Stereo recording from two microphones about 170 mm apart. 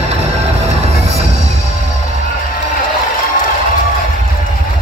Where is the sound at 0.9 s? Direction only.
40° right (ahead or behind).